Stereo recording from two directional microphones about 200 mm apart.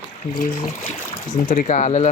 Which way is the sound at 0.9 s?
35° left (ahead or behind).